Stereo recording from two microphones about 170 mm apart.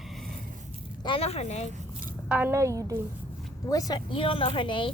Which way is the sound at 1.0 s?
30° left (ahead or behind).